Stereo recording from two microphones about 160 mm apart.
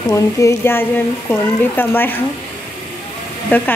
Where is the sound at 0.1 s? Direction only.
20° left (ahead or behind).